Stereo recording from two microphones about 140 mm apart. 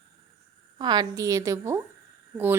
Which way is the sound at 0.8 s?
30° right (ahead or behind).